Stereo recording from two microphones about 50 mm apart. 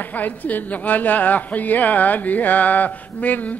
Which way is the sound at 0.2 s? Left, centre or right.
Left.